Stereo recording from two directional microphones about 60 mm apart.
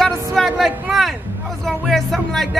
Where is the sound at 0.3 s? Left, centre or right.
Centre.